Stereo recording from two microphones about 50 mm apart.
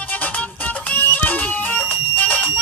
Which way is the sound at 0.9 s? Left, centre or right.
Left.